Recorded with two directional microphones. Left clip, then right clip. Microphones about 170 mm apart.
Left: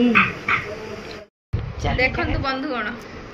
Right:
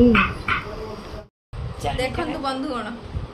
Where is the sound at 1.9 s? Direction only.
Centre (ahead or behind).